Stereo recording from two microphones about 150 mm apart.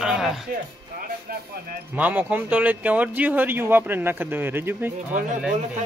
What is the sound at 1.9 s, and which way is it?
Speech, 10° right (ahead or behind).